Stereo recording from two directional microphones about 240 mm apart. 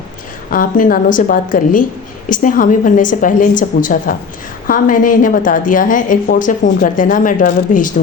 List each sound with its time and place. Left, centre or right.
0.5 s a woman's voice: left